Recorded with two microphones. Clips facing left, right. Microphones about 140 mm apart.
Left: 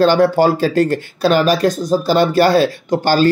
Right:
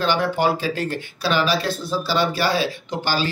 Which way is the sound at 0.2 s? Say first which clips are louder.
Left 8 dB; 45° left (ahead or behind).